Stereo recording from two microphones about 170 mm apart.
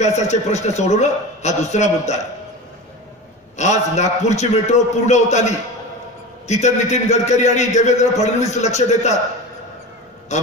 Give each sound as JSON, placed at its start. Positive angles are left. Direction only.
{"t": 0.0, "sound": "a man's voice", "side_deg": 40}
{"t": 3.5, "sound": "a man's voice", "side_deg": 45}
{"t": 10.3, "sound": "a man's voice", "side_deg": 40}